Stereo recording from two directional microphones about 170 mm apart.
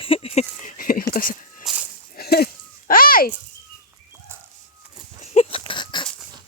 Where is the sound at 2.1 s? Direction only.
65° left (ahead or behind).